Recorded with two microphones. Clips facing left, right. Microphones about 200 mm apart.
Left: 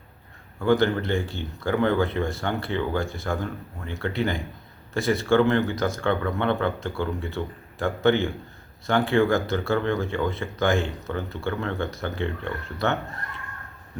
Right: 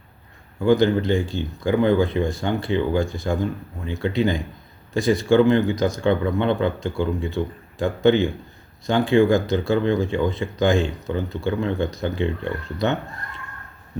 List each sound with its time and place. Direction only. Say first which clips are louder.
0.6 s speech: right 4 dB; 15° right (ahead or behind)